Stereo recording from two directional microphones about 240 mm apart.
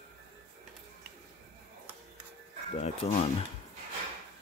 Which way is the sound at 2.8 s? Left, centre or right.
Left.